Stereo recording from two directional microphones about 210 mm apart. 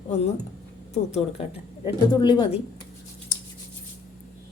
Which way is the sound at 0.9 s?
30° left (ahead or behind).